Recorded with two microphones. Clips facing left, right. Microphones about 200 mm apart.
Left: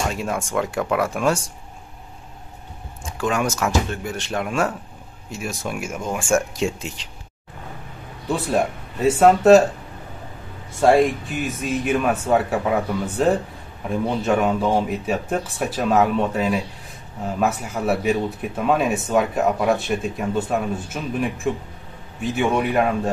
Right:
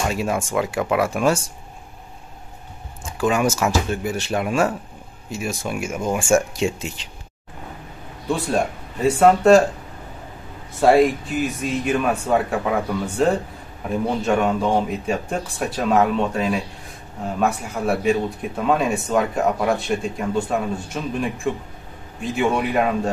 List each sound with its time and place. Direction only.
0.1 s speech: 5° right (ahead or behind)
3.2 s speech: 5° right (ahead or behind)
8.3 s speech: centre (ahead or behind)
10.8 s speech: centre (ahead or behind)